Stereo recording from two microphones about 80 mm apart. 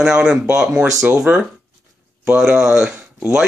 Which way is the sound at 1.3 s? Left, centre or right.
Right.